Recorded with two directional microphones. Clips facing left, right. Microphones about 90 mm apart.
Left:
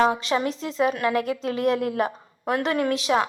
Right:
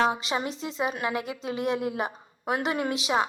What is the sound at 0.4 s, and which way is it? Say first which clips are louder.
Speech: left 6 dB; 5° right (ahead or behind).